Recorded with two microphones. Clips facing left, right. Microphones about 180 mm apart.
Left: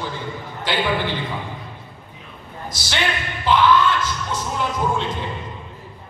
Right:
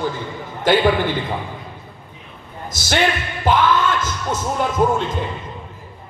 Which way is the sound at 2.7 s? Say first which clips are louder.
Right 3 dB; 45° right (ahead or behind).